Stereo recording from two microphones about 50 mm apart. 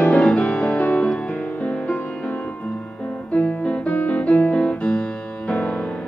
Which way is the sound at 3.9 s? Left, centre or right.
Left.